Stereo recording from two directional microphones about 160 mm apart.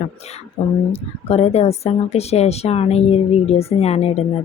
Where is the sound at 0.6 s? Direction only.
45° left (ahead or behind).